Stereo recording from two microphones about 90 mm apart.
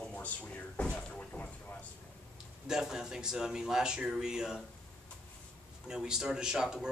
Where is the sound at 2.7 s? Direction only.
5° right (ahead or behind).